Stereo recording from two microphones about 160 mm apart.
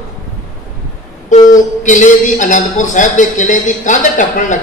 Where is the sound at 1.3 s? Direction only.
50° left (ahead or behind).